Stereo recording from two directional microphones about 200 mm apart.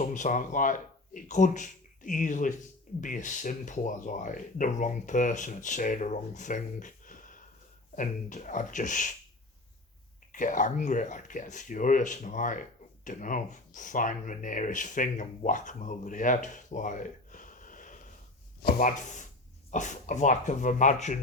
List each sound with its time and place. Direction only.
0.0 s speech: 40° left (ahead or behind)
10.3 s speech: 40° left (ahead or behind)